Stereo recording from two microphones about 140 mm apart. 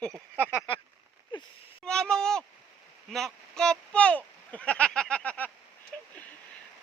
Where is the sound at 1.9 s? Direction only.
5° left (ahead or behind).